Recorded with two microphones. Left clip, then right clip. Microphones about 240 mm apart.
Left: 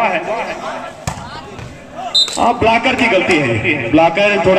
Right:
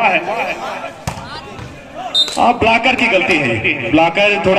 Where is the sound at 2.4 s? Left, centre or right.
Right.